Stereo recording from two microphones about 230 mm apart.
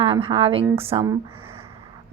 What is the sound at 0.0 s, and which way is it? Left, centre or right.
A woman's voice, right.